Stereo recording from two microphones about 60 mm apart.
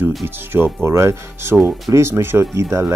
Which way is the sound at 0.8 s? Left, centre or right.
Right.